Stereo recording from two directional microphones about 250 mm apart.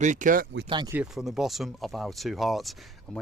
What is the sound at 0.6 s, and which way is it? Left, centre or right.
Speech, centre.